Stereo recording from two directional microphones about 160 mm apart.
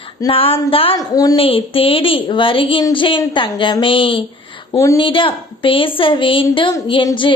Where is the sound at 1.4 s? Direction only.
35° left (ahead or behind).